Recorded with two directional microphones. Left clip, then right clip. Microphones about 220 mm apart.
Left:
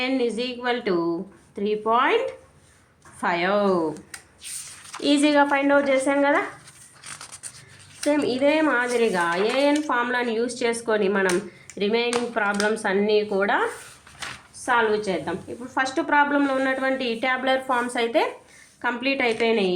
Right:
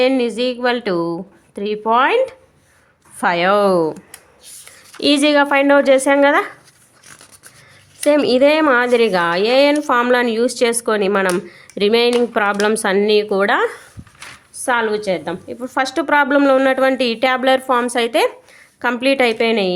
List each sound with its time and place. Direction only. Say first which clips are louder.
0.0 s a woman's voice: right 9 dB; 45° right (ahead or behind)
4.9 s a woman's voice: right 6 dB; 40° right (ahead or behind)
8.0 s a woman's voice: right 9 dB; 50° right (ahead or behind)